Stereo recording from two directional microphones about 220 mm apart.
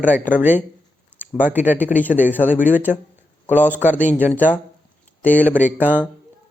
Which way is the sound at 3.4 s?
10° left (ahead or behind).